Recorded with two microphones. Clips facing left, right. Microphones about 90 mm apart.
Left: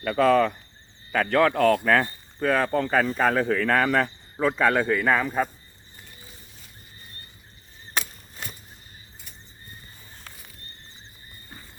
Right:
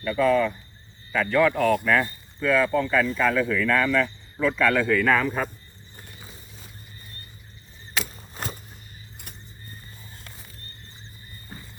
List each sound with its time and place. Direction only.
0.0 s speech: 70° left (ahead or behind)
1.1 s speech: 55° left (ahead or behind); by 4.9 s 30° left (ahead or behind)
4.9 s speech: 15° left (ahead or behind)